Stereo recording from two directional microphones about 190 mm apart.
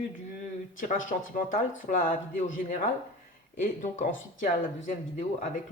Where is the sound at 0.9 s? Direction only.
45° left (ahead or behind).